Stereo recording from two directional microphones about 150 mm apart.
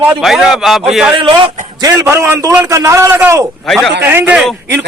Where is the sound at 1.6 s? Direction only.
30° right (ahead or behind).